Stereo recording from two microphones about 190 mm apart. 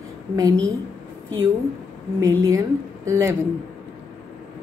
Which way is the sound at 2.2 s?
15° right (ahead or behind).